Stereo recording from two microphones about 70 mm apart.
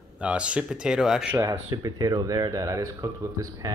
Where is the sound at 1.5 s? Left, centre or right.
Right.